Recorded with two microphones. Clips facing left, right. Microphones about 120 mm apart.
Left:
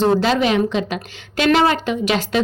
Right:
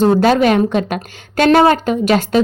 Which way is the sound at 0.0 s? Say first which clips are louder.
Right 5 dB; 50° right (ahead or behind).